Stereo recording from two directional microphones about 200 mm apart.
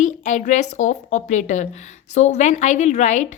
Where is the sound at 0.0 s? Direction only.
35° left (ahead or behind).